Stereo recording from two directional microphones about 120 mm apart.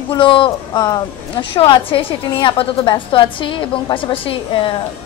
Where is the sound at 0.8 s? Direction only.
30° left (ahead or behind).